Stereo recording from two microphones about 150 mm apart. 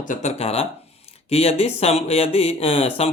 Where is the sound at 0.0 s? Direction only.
55° left (ahead or behind).